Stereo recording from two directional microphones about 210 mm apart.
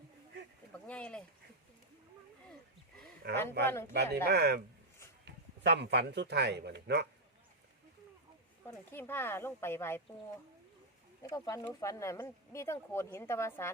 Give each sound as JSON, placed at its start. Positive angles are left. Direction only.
{"t": 0.9, "sound": "speech", "side_deg": 5}
{"t": 3.2, "sound": "speech", "side_deg": -50}
{"t": 3.6, "sound": "speech", "side_deg": 10}
{"t": 3.9, "sound": "speech", "side_deg": -50}
{"t": 8.6, "sound": "speech", "side_deg": 10}
{"t": 11.2, "sound": "speech", "side_deg": 15}